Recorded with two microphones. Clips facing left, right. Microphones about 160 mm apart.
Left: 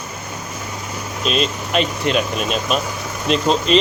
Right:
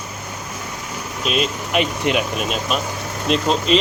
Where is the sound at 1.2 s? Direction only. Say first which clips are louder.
Left 1 dB; 10° right (ahead or behind).